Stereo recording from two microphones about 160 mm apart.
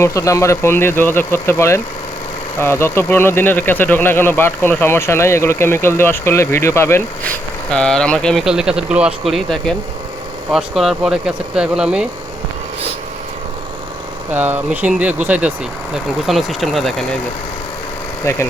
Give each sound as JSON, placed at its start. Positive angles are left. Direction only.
{"t": 0.0, "sound": "speech", "side_deg": 20}
{"t": 7.7, "sound": "speech", "side_deg": 5}
{"t": 14.3, "sound": "speech", "side_deg": -10}
{"t": 18.3, "sound": "speech", "side_deg": 15}